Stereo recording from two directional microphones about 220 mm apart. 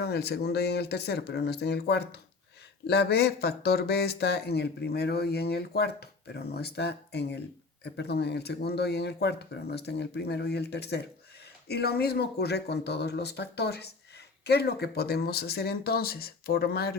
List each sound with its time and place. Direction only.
0.0 s speech: 45° left (ahead or behind)